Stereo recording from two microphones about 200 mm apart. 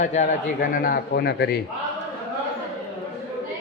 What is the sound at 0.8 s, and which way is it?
Speech, 50° left (ahead or behind).